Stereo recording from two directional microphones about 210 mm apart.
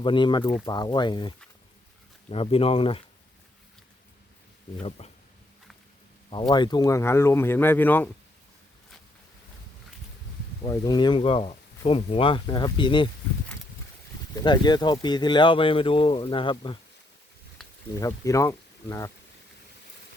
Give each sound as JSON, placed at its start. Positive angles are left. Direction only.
{"t": 0.0, "sound": "speech", "side_deg": 20}
{"t": 4.8, "sound": "speech", "side_deg": 30}
{"t": 6.5, "sound": "speech", "side_deg": 20}
{"t": 10.6, "sound": "speech", "side_deg": 20}
{"t": 14.3, "sound": "speech", "side_deg": 20}
{"t": 17.9, "sound": "speech", "side_deg": 15}